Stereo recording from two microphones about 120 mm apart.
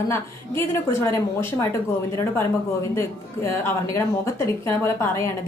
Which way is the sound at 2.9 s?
25° left (ahead or behind).